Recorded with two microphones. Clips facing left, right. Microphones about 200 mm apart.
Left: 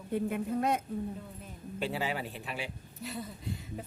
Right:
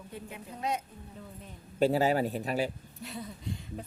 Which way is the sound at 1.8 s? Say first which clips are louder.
Right 9 dB; 40° right (ahead or behind).